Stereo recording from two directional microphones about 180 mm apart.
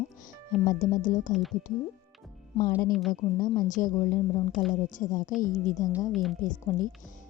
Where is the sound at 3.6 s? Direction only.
45° left (ahead or behind).